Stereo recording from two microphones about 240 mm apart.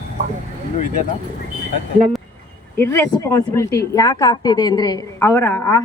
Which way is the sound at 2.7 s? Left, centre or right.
Centre.